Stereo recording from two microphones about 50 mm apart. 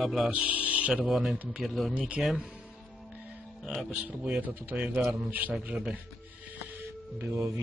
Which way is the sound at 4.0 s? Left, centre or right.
Right.